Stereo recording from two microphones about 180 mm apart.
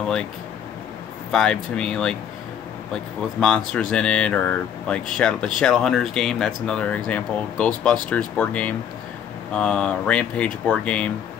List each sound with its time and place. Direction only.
1.3 s speech: 5° left (ahead or behind)